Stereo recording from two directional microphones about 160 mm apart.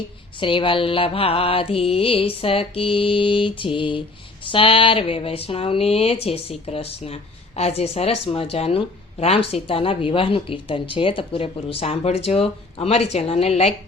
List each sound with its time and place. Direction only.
0.3 s a woman's voice: 30° left (ahead or behind)